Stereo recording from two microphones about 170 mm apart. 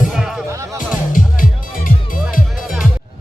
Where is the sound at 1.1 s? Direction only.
50° left (ahead or behind).